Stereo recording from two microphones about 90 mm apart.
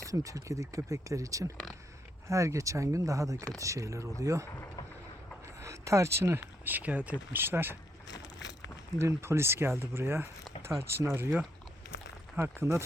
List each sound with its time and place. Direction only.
0.0 s speech: 35° right (ahead or behind)
5.5 s speech: 35° right (ahead or behind)
9.0 s speech: 30° right (ahead or behind)
12.4 s speech: 30° right (ahead or behind)